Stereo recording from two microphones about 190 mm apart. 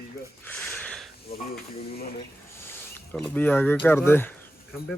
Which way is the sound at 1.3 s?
55° left (ahead or behind).